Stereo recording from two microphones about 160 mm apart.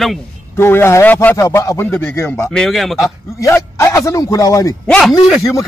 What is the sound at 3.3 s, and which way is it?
A man's voice, 15° left (ahead or behind).